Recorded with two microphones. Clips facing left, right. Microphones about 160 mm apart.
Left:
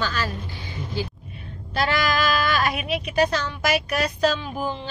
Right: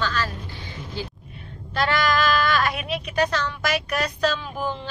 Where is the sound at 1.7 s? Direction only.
5° left (ahead or behind).